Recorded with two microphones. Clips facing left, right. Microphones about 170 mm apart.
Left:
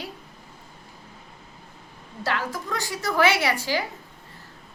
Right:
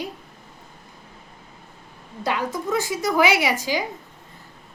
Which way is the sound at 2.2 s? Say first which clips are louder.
Right 3 dB; 15° right (ahead or behind).